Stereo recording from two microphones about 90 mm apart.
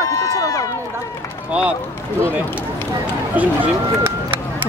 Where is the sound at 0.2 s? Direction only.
40° left (ahead or behind).